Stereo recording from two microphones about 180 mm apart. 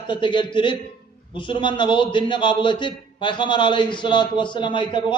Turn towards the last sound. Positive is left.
turn(degrees=25)  # may be behind; listen again after turning